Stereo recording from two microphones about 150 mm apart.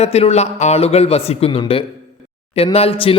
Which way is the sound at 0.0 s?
45° left (ahead or behind).